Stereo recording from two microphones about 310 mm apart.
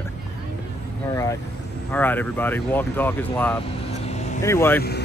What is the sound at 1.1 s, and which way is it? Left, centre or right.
Speech, centre.